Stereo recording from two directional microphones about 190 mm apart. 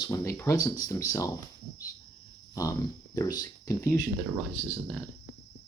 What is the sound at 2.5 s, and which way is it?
Speech, 15° left (ahead or behind).